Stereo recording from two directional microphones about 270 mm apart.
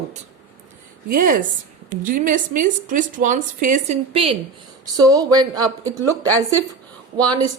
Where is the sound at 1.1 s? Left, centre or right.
Right; by 5.7 s centre.